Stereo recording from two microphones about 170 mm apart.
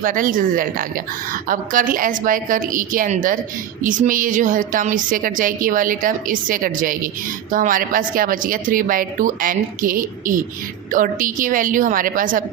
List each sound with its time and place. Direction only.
0.0 s a woman's voice: 55° right (ahead or behind)